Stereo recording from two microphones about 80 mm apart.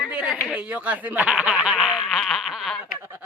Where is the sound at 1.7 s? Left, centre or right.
Centre.